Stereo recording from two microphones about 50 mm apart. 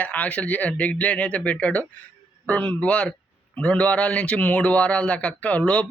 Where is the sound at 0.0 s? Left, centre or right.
Left.